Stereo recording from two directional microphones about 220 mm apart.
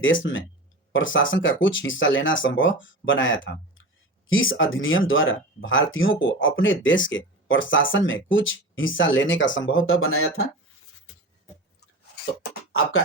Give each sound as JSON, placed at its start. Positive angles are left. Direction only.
{"t": 0.2, "sound": "speech", "side_deg": 50}